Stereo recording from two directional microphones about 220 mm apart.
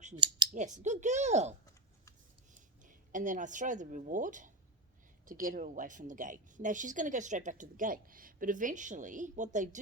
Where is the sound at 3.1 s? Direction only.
35° right (ahead or behind).